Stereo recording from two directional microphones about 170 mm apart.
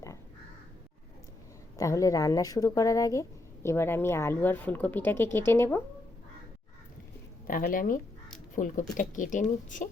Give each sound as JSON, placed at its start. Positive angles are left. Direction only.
{"t": 1.8, "sound": "speech", "side_deg": 20}
{"t": 7.4, "sound": "speech", "side_deg": 55}